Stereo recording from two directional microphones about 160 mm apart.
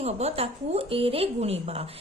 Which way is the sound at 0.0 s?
40° right (ahead or behind).